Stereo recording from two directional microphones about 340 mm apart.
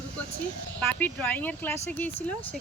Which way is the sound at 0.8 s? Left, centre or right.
Centre.